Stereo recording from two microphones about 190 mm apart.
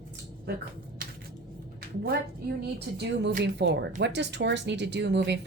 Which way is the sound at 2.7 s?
60° right (ahead or behind).